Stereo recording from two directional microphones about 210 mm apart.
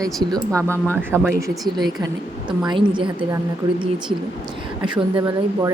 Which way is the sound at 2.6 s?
25° right (ahead or behind).